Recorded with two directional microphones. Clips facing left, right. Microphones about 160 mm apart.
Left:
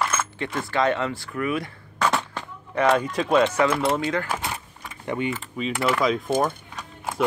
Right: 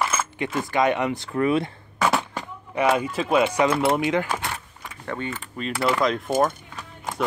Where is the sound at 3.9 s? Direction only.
15° right (ahead or behind).